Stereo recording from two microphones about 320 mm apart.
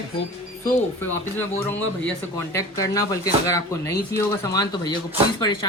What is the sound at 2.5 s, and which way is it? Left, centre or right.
Speech, centre.